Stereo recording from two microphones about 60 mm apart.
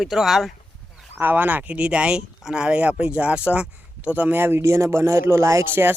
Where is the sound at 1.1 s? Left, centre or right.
Right.